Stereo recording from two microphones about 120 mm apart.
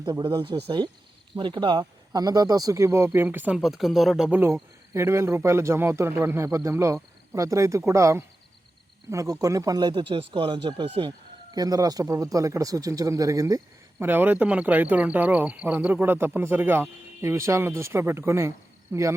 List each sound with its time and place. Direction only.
0.0 s speech: 35° right (ahead or behind); by 3.6 s 15° right (ahead or behind)
3.6 s speech: centre (ahead or behind)
4.3 s a man's voice: 20° right (ahead or behind); by 11.1 s 45° right (ahead or behind)
11.5 s a man's voice: 30° right (ahead or behind)
14.0 s a man's voice: 15° right (ahead or behind)